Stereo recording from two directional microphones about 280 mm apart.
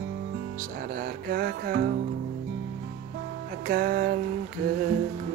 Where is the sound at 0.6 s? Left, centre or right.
Right.